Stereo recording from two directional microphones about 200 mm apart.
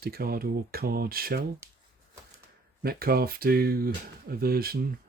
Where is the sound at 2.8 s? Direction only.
50° right (ahead or behind).